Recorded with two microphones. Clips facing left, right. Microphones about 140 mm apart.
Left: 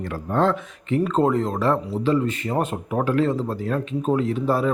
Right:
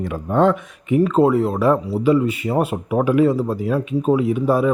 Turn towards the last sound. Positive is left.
turn(degrees=-10)  # may be behind; listen again after turning